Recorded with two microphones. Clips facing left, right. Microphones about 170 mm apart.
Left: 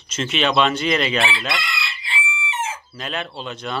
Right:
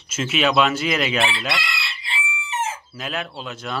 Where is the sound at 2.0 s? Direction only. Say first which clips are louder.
Left 2 dB; 40° right (ahead or behind).